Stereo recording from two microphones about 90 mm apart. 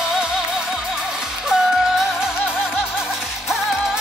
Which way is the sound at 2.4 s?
20° left (ahead or behind).